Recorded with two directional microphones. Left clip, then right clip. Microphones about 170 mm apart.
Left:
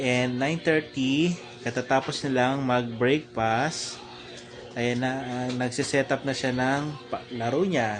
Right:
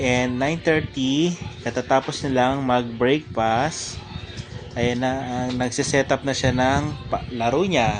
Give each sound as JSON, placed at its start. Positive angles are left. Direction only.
{"t": 0.0, "sound": "speech", "side_deg": -30}